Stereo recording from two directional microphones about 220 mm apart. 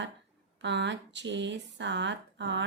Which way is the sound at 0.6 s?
55° right (ahead or behind).